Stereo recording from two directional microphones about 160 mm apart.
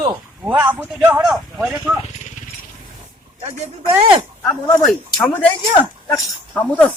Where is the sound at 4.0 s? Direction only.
35° right (ahead or behind).